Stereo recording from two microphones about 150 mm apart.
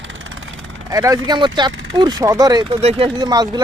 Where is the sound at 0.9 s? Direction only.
25° right (ahead or behind).